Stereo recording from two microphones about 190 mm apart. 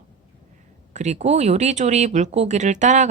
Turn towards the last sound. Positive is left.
turn(degrees=-40)  # may be behind; listen again after turning